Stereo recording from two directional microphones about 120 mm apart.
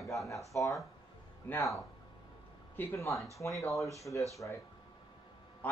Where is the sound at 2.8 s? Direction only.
20° left (ahead or behind).